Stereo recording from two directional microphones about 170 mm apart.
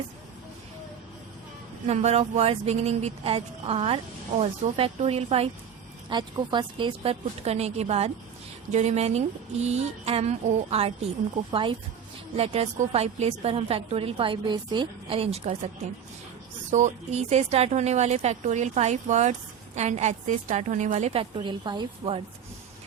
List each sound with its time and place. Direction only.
1.9 s a woman's voice: 40° right (ahead or behind)
16.7 s a woman's voice: 40° right (ahead or behind)